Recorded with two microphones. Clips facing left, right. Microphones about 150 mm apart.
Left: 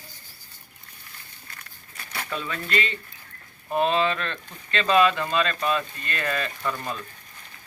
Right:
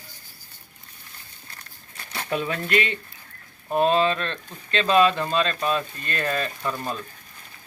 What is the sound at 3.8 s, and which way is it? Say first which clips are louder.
Speech: right 3 dB; 35° right (ahead or behind).